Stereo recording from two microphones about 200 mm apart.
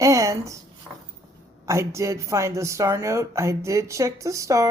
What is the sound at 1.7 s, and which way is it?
Speech, 15° right (ahead or behind).